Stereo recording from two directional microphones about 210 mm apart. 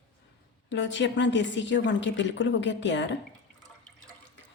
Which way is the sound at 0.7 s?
60° left (ahead or behind).